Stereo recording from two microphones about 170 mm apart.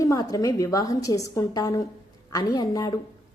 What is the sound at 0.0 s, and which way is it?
A woman's voice, 20° left (ahead or behind).